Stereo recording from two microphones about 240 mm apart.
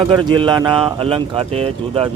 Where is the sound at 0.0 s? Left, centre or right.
Right.